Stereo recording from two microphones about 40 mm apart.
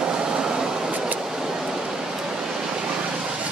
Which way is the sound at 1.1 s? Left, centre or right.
Centre.